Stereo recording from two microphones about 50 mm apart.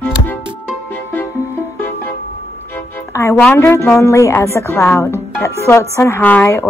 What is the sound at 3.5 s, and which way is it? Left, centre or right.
Speech, left.